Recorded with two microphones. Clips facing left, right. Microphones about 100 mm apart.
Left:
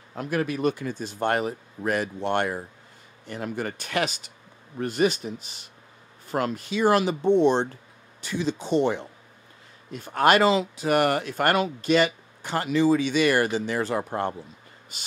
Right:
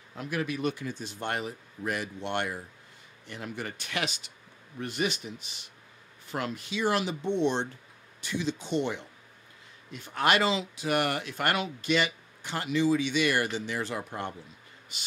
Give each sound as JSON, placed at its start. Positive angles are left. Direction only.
{"t": 0.1, "sound": "a man's voice", "side_deg": 45}